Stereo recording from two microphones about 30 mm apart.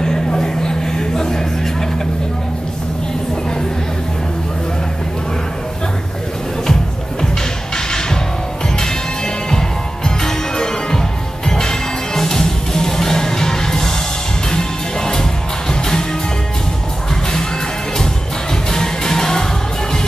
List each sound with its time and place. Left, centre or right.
0.0 s a sound: left
7.7 s music: left
9.5 s music: centre
18.5 s music: left